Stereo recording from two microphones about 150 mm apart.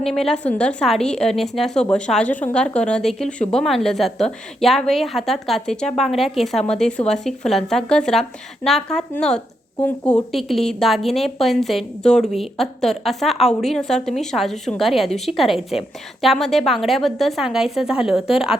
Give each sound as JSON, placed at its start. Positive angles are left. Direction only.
{"t": 0.0, "sound": "a woman's voice", "side_deg": 5}